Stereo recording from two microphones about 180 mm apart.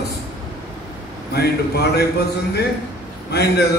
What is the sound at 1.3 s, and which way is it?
Speech, 65° left (ahead or behind).